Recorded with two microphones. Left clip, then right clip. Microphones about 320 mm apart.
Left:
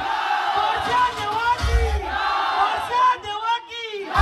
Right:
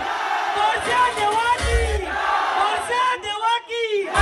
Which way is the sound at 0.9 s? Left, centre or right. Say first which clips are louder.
Right 2 dB; centre.